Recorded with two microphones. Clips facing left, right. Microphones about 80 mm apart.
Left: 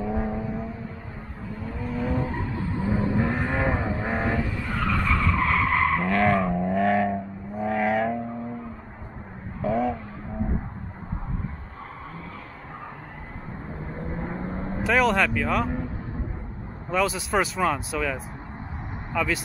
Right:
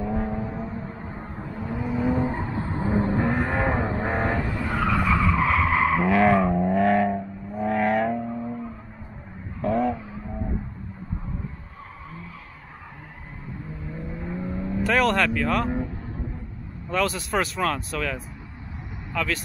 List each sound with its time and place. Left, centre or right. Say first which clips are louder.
0.0 s vehicle: even; centre
1.5 s vehicle: right 3 dB; centre; by 3.2 s right
3.2 s vehicle: right 1 dB; centre
9.6 s vehicle: right 1 dB; centre
13.8 s vehicle: left 1 dB; left
14.9 s vehicle: even; centre
16.9 s speech: left 1 dB; centre